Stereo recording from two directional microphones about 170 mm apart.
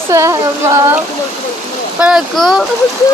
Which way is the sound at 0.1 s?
15° right (ahead or behind).